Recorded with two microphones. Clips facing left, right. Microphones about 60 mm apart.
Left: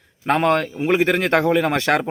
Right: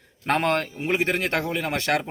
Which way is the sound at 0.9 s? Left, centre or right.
Left.